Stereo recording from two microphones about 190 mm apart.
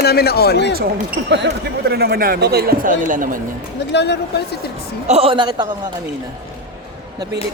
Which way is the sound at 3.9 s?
65° left (ahead or behind).